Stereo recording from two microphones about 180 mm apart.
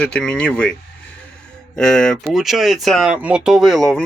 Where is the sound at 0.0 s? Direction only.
5° left (ahead or behind).